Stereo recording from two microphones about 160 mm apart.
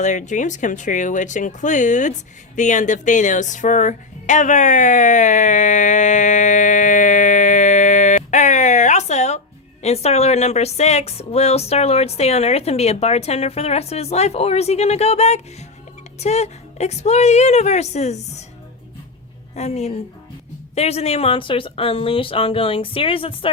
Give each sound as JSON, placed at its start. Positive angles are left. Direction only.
{"t": 0.0, "sound": "a woman's voice", "side_deg": 50}
{"t": 19.5, "sound": "a woman's voice", "side_deg": 45}